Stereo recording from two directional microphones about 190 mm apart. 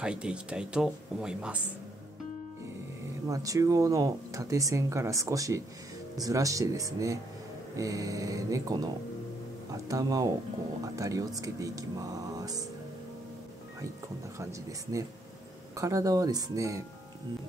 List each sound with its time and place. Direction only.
0.0 s speech: 5° right (ahead or behind)
3.3 s speech: 15° right (ahead or behind)
14.4 s speech: 15° right (ahead or behind)